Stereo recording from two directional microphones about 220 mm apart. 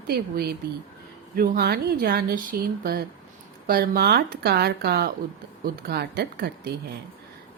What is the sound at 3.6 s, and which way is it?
A woman's voice, 45° right (ahead or behind).